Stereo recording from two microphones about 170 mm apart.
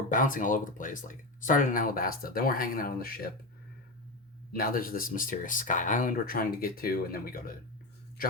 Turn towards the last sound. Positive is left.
turn(degrees=55)  # may be behind; listen again after turning